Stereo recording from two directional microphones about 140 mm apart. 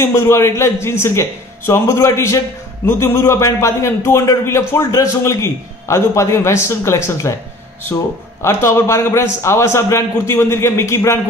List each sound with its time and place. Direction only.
0.0 s a man's voice: 20° left (ahead or behind)
8.4 s a man's voice: 20° left (ahead or behind)